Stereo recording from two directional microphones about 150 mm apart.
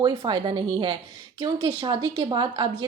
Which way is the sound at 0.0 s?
30° right (ahead or behind).